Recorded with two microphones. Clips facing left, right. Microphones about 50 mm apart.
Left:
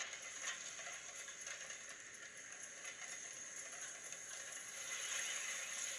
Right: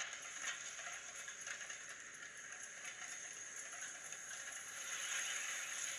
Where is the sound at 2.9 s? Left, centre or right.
Right.